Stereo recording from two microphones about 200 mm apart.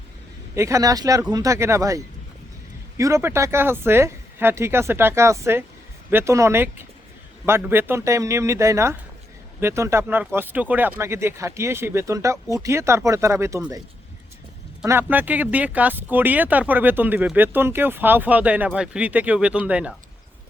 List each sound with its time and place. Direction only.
0.5 s speech: 15° right (ahead or behind)
3.0 s speech: 15° right (ahead or behind)
14.8 s speech: 10° right (ahead or behind)